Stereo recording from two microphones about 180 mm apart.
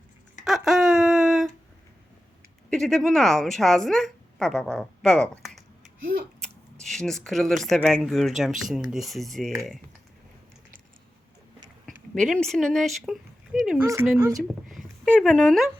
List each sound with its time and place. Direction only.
0.4 s a sound: centre (ahead or behind)
2.6 s a woman's voice: centre (ahead or behind)
5.4 s a sound: centre (ahead or behind)
6.4 s scissors: centre (ahead or behind)
7.9 s a woman's voice: centre (ahead or behind)
11.9 s speech: 5° left (ahead or behind)
13.7 s speech: 15° right (ahead or behind)
14.3 s speech: centre (ahead or behind)